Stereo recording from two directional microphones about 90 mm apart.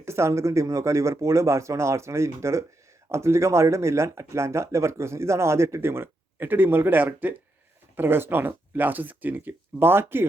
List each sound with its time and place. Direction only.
0.0 s speech: 30° right (ahead or behind)